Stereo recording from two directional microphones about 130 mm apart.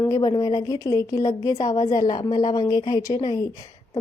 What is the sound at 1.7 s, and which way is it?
Speech, 30° left (ahead or behind).